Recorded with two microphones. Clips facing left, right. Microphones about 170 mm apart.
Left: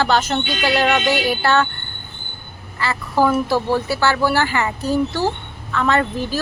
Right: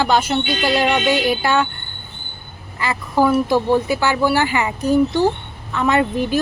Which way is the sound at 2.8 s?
15° right (ahead or behind).